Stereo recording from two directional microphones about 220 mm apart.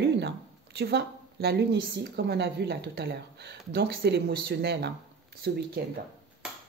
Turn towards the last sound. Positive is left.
turn(degrees=-45)  # may be behind; listen again after turning